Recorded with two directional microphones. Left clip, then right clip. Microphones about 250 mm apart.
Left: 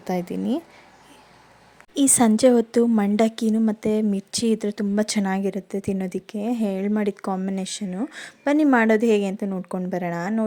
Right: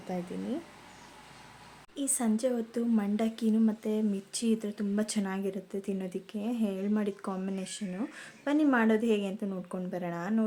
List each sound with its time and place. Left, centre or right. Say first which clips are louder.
0.1 s speech: left 11 dB; left
2.0 s a woman's voice: left 13 dB; left